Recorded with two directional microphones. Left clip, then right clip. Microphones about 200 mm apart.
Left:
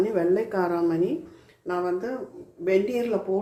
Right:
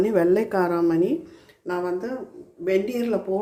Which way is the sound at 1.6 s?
15° right (ahead or behind).